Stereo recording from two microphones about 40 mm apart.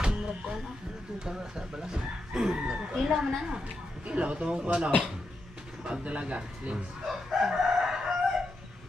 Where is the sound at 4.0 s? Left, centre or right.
Right.